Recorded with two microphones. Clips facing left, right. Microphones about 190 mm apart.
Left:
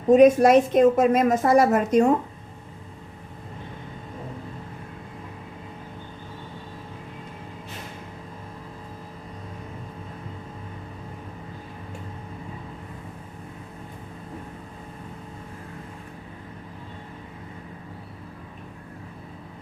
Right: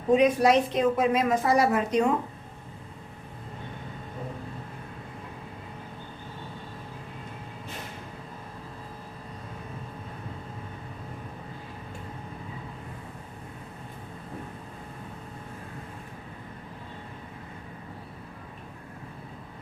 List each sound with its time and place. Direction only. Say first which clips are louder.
0.1 s a woman's voice: left 6 dB; 45° left (ahead or behind)